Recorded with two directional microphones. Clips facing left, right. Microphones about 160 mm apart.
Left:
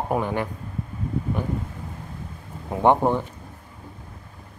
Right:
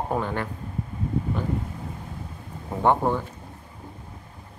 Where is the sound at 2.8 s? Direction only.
20° left (ahead or behind).